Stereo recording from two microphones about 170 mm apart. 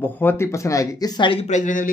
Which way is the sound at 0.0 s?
10° left (ahead or behind).